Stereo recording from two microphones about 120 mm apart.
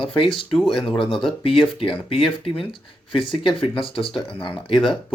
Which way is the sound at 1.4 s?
45° left (ahead or behind).